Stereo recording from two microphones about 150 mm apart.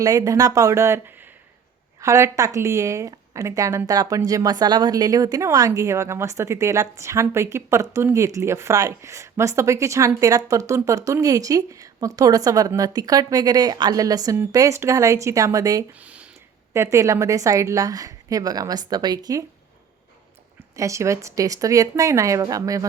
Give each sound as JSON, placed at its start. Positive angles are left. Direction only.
{"t": 0.0, "sound": "a woman's voice", "side_deg": -25}
{"t": 16.0, "sound": "a sound", "side_deg": -10}
{"t": 16.7, "sound": "a woman's voice", "side_deg": -20}
{"t": 20.6, "sound": "a woman's voice", "side_deg": -20}